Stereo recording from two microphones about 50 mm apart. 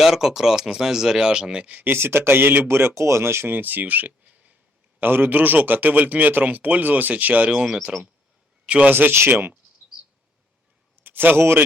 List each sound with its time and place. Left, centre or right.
0.0 s speech: centre
1.7 s a man's voice: right
2.6 s speech: right
3.0 s speech: right
3.5 s speech: right
4.9 s speech: right
7.6 s speech: centre
8.9 s speech: right
10.9 s a sound: right